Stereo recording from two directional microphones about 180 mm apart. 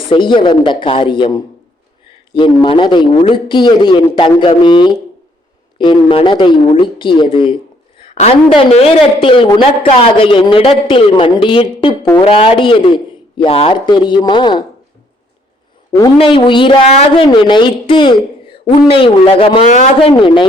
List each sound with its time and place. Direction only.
0.1 s speech: 25° left (ahead or behind)
16.0 s speech: 25° left (ahead or behind)